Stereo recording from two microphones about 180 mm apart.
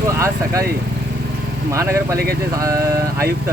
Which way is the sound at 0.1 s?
15° right (ahead or behind).